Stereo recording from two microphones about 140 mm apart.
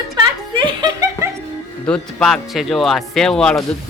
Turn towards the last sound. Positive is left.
turn(degrees=5)  # may be behind; listen again after turning